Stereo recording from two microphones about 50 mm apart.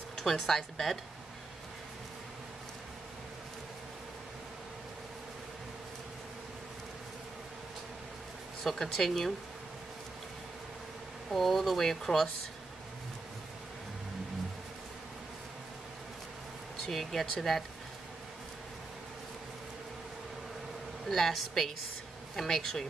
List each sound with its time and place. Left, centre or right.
0.1 s speech: centre
8.6 s speech: centre
11.2 s speech: centre
16.9 s speech: centre
21.1 s speech: centre